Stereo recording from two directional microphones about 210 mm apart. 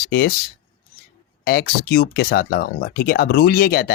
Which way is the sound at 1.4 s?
45° left (ahead or behind).